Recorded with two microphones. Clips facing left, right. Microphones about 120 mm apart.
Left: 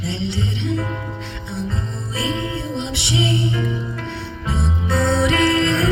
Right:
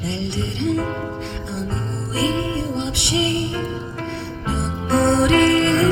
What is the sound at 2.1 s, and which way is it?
Music, 55° right (ahead or behind).